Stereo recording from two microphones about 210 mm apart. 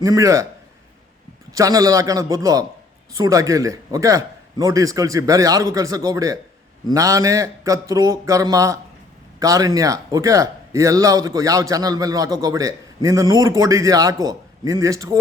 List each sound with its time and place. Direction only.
0.0 s a man's voice: 15° right (ahead or behind)
1.5 s a man's voice: 15° right (ahead or behind)